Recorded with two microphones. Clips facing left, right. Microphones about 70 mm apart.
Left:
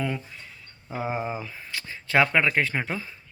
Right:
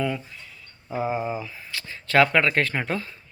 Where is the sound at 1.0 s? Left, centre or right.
Centre.